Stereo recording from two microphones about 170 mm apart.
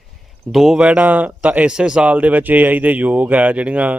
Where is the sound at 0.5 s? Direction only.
Centre (ahead or behind).